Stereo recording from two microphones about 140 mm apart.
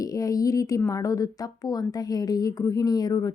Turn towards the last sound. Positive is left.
turn(degrees=25)  # may be behind; listen again after turning